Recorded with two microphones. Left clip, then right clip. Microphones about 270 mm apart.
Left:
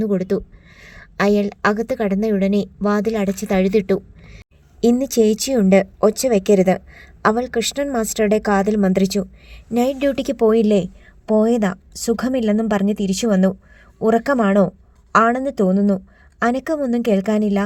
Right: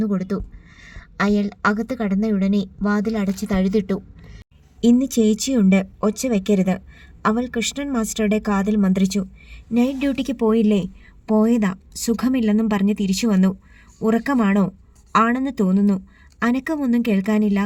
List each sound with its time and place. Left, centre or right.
0.0 s speech: left
3.7 s a woman's voice: left
4.8 s a woman's voice: left